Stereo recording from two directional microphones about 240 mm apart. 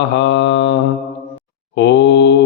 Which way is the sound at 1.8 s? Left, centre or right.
Left.